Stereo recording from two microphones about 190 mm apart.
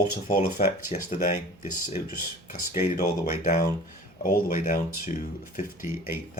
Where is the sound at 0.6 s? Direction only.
45° left (ahead or behind).